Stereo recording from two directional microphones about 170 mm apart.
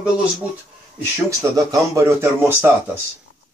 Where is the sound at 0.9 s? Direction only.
20° right (ahead or behind).